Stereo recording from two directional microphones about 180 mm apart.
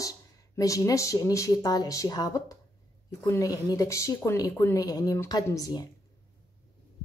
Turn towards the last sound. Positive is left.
turn(degrees=20)  # may be behind; listen again after turning